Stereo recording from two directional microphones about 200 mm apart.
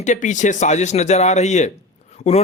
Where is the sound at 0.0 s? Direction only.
40° left (ahead or behind).